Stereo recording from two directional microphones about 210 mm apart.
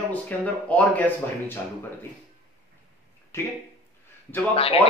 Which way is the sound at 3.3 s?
10° left (ahead or behind).